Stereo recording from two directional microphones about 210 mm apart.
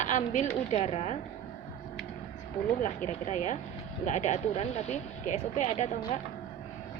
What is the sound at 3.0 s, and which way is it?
Speech, 35° left (ahead or behind).